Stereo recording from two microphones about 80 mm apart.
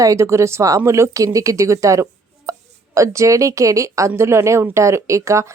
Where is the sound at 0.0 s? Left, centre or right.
Right.